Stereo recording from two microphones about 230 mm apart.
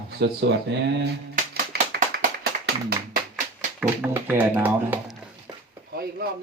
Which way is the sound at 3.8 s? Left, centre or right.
Centre.